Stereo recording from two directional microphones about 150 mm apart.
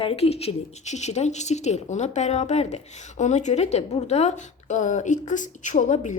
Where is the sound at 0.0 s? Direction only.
40° left (ahead or behind).